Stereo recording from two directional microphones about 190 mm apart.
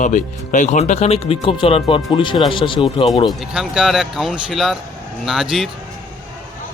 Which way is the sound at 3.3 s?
5° right (ahead or behind).